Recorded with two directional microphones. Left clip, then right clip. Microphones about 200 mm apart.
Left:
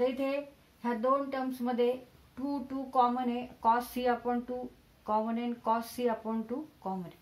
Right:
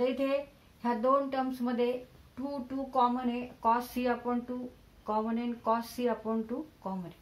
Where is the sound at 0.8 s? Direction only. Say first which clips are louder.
Right 2 dB; 20° left (ahead or behind).